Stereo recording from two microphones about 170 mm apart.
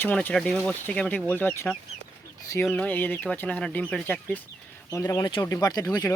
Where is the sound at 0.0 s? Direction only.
10° left (ahead or behind).